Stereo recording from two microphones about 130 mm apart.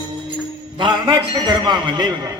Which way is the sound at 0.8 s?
35° right (ahead or behind).